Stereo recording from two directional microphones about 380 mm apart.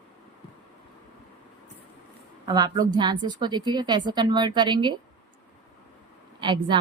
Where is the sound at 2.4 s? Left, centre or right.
Centre.